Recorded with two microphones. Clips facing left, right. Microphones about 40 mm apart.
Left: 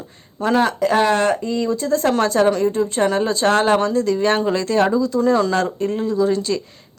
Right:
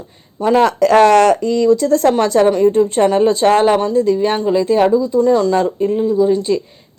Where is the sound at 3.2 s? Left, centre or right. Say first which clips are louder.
Right 6 dB; right.